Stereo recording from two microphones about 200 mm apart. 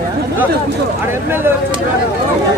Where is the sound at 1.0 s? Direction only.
10° right (ahead or behind).